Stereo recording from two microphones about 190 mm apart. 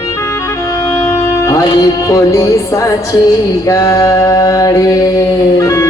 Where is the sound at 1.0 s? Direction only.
15° left (ahead or behind).